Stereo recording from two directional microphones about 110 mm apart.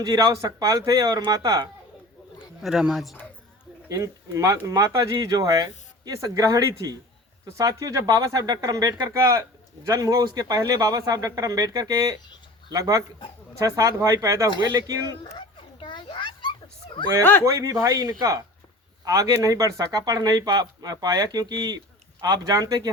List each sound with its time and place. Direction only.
0.0 s speech: 35° right (ahead or behind)
2.6 s a man's voice: 5° right (ahead or behind)
3.8 s speech: 30° right (ahead or behind)
15.3 s dog: 50° left (ahead or behind)
17.4 s speech: 30° right (ahead or behind)